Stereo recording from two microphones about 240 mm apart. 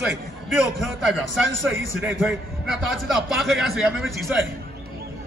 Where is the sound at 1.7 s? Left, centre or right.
Right.